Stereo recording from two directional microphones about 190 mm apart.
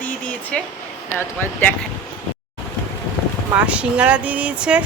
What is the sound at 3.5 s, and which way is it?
Speech, 5° right (ahead or behind).